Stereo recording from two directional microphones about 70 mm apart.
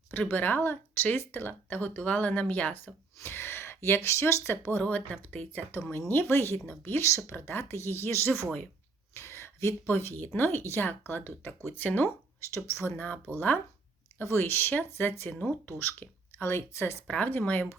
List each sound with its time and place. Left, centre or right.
0.1 s speech: left
3.2 s speech: left
4.8 s speech: left
9.1 s a sound: left
9.9 s speech: left
12.5 s speech: left
13.0 s speech: left
16.4 s speech: left
17.1 s speech: left